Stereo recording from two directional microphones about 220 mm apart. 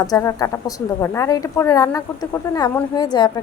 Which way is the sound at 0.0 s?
15° left (ahead or behind).